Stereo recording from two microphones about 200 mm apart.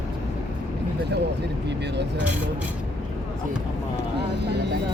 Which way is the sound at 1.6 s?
60° right (ahead or behind).